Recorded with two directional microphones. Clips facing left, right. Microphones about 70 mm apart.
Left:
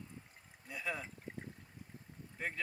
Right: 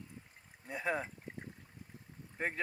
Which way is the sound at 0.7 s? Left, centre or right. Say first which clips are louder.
Right 5 dB; right.